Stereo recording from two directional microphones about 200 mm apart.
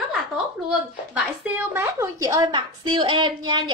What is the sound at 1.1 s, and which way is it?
A woman's voice, 10° right (ahead or behind).